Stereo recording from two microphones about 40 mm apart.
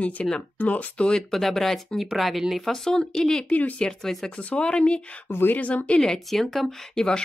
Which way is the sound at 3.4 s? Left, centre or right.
Left.